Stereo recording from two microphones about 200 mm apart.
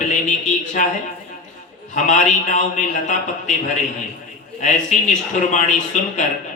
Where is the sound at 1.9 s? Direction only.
40° left (ahead or behind).